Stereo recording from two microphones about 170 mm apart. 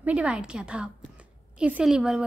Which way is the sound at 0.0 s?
5° right (ahead or behind).